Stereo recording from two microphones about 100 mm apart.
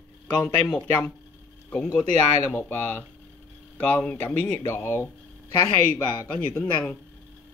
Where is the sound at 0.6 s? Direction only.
5° left (ahead or behind).